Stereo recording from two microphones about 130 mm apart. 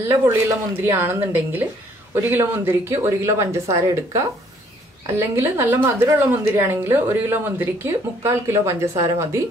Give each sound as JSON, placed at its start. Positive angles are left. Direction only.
{"t": 0.1, "sound": "a woman's voice", "side_deg": -20}